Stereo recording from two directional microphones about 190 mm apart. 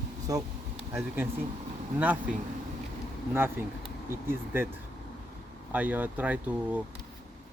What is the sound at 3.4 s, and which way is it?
Speech, 10° right (ahead or behind).